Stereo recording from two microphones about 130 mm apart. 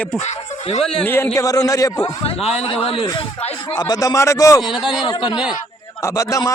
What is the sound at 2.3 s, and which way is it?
Speech, 50° left (ahead or behind).